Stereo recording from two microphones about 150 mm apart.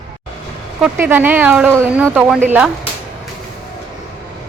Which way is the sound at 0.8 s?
15° right (ahead or behind).